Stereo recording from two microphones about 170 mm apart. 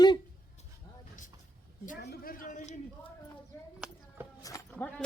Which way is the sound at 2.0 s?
65° left (ahead or behind).